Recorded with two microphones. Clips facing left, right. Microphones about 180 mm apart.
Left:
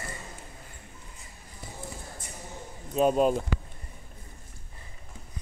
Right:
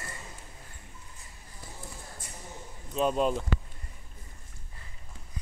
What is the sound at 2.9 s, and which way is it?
Speech, 45° left (ahead or behind).